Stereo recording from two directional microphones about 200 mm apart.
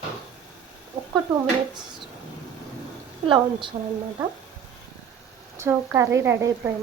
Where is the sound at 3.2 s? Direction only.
25° right (ahead or behind).